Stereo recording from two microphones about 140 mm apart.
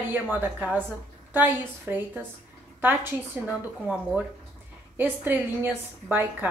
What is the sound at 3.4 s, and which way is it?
A woman's voice, 10° right (ahead or behind).